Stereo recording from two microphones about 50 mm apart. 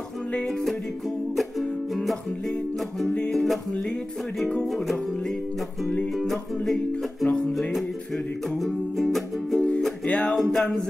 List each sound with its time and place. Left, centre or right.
0.5 s music: centre
4.6 s music: centre
6.1 s music: centre
8.5 s music: centre
10.0 s music: left
10.3 s music: centre